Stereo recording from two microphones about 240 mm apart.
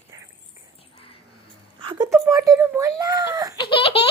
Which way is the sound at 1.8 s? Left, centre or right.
Centre.